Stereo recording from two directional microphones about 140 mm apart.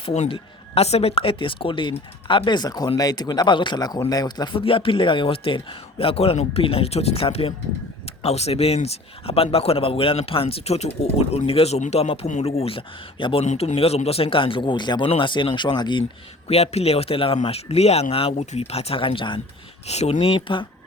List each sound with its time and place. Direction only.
0.0 s speech: 45° left (ahead or behind)
13.4 s speech: 55° left (ahead or behind); by 16.0 s 35° left (ahead or behind)
16.5 s speech: 50° left (ahead or behind)
19.9 s speech: 50° left (ahead or behind)
20.5 s speech: 35° left (ahead or behind)